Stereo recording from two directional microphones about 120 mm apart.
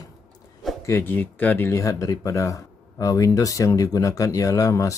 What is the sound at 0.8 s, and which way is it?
Speech, 20° left (ahead or behind).